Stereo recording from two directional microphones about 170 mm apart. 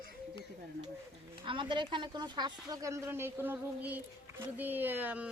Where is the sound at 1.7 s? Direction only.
30° right (ahead or behind); by 5.3 s 10° right (ahead or behind).